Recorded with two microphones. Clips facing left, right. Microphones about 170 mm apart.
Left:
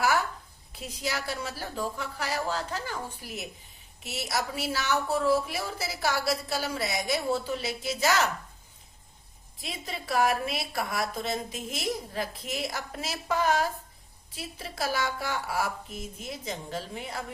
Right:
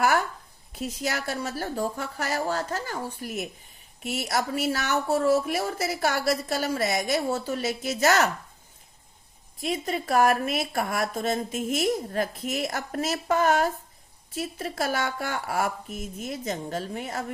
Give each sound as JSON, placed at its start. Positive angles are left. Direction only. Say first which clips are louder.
{"t": 0.7, "sound": "a woman's voice", "louder": "right 4 dB", "side_deg": -50}
{"t": 9.6, "sound": "a woman's voice", "louder": "right 9 dB", "side_deg": -45}